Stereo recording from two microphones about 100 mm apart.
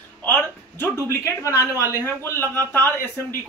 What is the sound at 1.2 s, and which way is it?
Speech, 30° left (ahead or behind).